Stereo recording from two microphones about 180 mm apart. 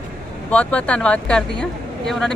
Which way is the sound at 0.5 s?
5° left (ahead or behind).